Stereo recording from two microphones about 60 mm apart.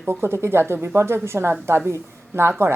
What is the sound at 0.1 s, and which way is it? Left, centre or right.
Speech, right.